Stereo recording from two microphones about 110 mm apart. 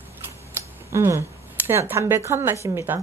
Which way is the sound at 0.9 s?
25° right (ahead or behind).